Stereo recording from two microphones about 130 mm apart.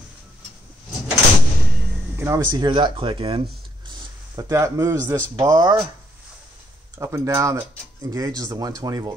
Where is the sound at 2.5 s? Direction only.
35° right (ahead or behind).